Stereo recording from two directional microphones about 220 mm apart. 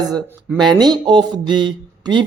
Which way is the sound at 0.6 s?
20° right (ahead or behind).